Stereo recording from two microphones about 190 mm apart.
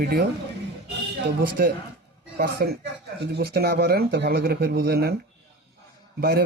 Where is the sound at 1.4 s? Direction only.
50° right (ahead or behind).